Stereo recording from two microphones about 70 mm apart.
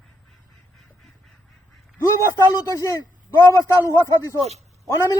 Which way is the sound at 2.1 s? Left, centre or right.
Left.